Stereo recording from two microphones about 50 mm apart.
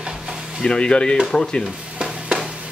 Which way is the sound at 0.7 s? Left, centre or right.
Centre.